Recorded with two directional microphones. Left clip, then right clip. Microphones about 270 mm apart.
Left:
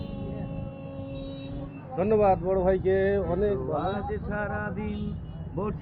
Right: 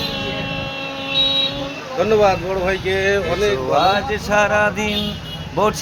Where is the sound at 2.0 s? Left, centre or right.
Centre.